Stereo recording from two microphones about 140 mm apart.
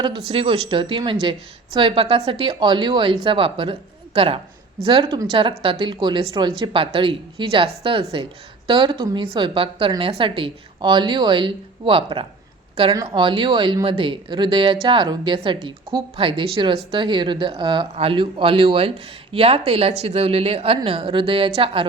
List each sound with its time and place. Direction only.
0.0 s a woman's voice: 35° right (ahead or behind)